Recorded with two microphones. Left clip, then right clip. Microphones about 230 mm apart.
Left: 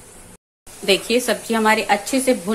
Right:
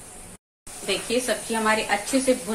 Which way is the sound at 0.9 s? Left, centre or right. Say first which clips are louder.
Left 7 dB; left.